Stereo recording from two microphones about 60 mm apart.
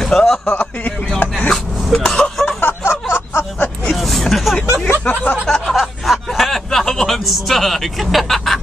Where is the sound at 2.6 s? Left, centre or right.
Left.